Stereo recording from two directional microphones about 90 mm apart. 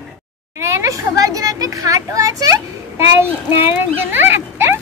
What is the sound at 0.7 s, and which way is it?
A child's voice, 35° right (ahead or behind).